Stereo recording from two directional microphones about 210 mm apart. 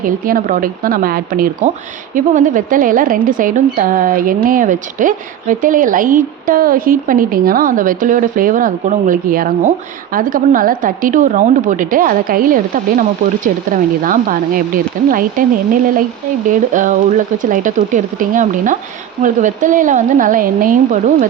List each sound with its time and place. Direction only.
0.0 s speech: 40° right (ahead or behind)